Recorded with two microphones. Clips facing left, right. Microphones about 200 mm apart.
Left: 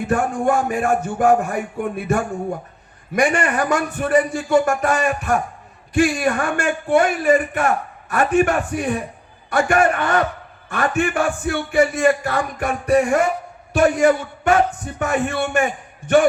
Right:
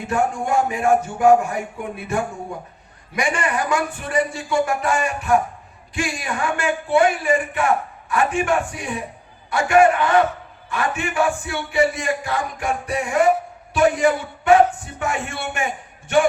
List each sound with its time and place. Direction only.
0.1 s a man's voice: 55° left (ahead or behind)
8.8 s a man's voice: 60° left (ahead or behind); by 15.2 s 40° left (ahead or behind)
15.3 s a man's voice: 55° left (ahead or behind)